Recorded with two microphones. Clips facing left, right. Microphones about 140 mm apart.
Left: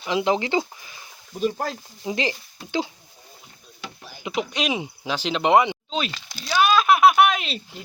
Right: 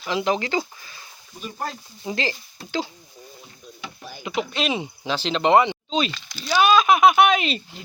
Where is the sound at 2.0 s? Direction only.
15° left (ahead or behind).